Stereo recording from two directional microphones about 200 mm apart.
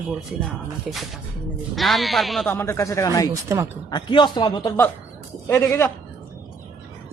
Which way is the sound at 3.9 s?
20° left (ahead or behind).